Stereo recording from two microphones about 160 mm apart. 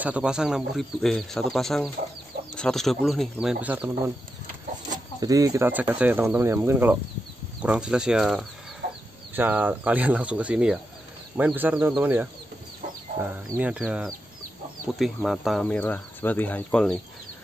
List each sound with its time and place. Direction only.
0.0 s speech: 5° right (ahead or behind)
5.2 s speech: 20° right (ahead or behind)
5.7 s speech: 10° right (ahead or behind)
8.8 s chicken: 75° right (ahead or behind)
9.3 s speech: 10° right (ahead or behind); by 17.0 s 5° left (ahead or behind)